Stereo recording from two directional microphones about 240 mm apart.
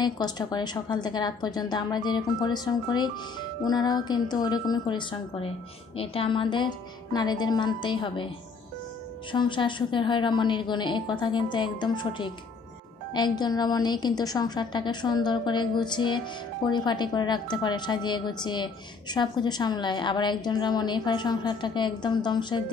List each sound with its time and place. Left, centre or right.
0.0 s a woman's voice: centre
9.3 s a woman's voice: centre